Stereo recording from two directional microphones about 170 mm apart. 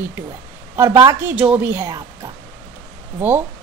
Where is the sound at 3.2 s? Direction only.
10° right (ahead or behind).